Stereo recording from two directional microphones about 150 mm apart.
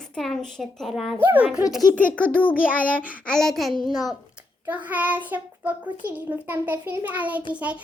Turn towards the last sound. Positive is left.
turn(degrees=-10)  # may be behind; listen again after turning